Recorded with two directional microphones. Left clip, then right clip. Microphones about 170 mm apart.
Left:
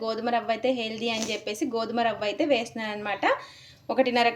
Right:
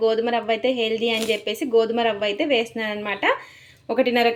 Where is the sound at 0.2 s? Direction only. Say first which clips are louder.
Right 5 dB; 30° right (ahead or behind).